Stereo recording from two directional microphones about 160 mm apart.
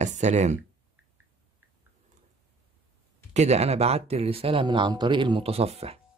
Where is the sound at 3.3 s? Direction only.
45° right (ahead or behind).